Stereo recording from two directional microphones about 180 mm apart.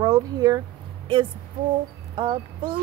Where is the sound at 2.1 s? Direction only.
25° right (ahead or behind).